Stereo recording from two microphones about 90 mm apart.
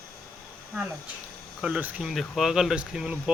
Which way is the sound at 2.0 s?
Centre (ahead or behind).